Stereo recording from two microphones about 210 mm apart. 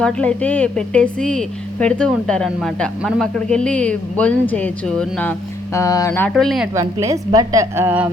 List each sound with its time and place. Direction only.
0.0 s a woman's voice: 5° left (ahead or behind)
6.3 s a woman's voice: centre (ahead or behind)
6.7 s a woman's voice: 15° right (ahead or behind)